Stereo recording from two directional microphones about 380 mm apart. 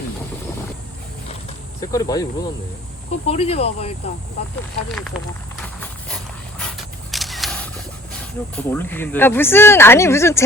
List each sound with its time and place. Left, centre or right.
1.8 s speech: centre
4.9 s a sound: centre
8.1 s speech: centre